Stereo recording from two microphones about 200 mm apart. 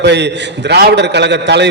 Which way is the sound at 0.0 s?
60° right (ahead or behind).